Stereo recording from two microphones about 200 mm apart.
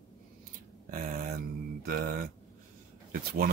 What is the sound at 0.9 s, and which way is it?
Speech, 45° right (ahead or behind).